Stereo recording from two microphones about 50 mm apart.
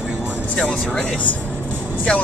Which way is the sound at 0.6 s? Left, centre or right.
Centre.